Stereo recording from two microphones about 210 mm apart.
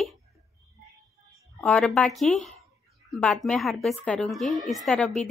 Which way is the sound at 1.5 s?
5° left (ahead or behind).